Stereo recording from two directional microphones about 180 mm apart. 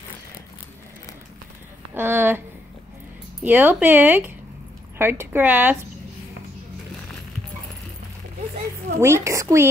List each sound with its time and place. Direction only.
2.0 s speech: 10° right (ahead or behind)
9.0 s speech: 15° right (ahead or behind)